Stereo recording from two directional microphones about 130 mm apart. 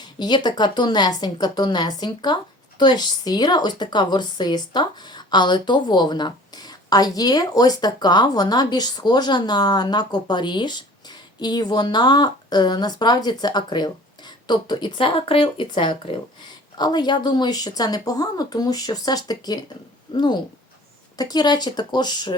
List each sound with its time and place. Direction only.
0.0 s a woman's voice: 35° left (ahead or behind)